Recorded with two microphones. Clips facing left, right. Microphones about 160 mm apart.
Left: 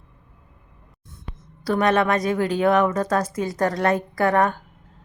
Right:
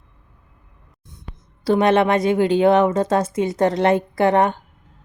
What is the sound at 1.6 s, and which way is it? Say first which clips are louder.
A woman's voice: right 4 dB; 25° right (ahead or behind).